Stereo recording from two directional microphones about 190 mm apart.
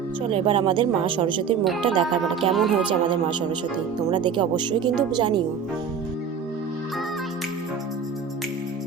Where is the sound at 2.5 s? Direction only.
Centre (ahead or behind).